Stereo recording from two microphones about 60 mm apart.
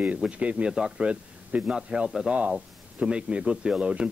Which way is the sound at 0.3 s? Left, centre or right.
Centre.